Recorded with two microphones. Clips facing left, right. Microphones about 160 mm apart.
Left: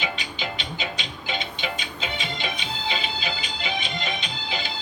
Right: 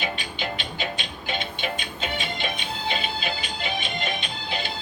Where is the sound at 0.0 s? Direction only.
55° right (ahead or behind).